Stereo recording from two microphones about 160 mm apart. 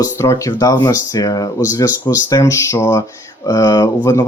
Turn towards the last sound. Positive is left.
turn(degrees=25)  # may be behind; listen again after turning